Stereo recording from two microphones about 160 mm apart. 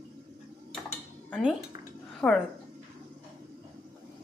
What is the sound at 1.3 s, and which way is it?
Speech, 5° right (ahead or behind).